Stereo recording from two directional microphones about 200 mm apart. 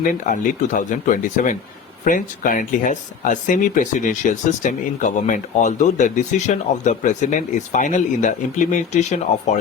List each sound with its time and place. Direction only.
0.1 s speech: 40° left (ahead or behind)